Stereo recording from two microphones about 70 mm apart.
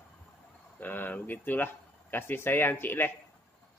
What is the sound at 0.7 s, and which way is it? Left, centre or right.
Speech, left.